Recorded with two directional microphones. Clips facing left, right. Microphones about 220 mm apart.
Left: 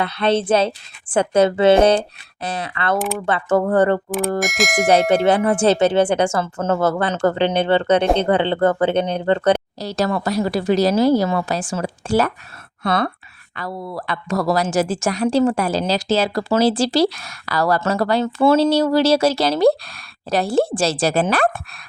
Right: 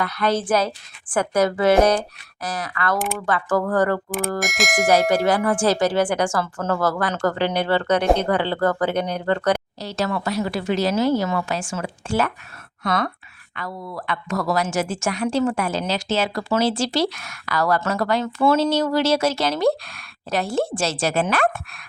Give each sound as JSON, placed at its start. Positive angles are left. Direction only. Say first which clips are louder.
{"t": 0.0, "sound": "speech", "louder": "left 3 dB", "side_deg": 25}
{"t": 4.4, "sound": "speech", "louder": "left 3 dB", "side_deg": 0}
{"t": 4.9, "sound": "speech", "louder": "left 3 dB", "side_deg": 25}
{"t": 9.7, "sound": "a woman's voice", "louder": "left 4 dB", "side_deg": 40}